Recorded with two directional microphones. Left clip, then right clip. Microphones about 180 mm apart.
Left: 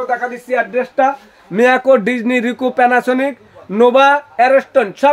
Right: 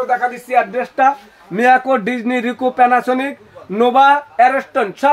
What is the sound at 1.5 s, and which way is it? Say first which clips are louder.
Speech: left 2 dB; 65° left (ahead or behind).